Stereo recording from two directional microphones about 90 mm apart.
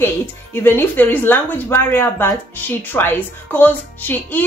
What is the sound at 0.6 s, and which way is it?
A woman's voice, 25° left (ahead or behind).